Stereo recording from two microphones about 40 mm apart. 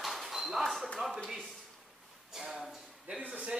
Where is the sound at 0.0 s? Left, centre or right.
Centre.